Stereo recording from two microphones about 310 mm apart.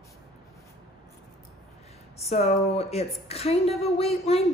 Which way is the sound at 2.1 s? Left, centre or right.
Centre.